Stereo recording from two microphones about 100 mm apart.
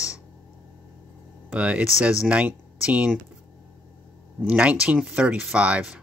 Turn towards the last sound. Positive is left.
turn(degrees=-10)  # may be behind; listen again after turning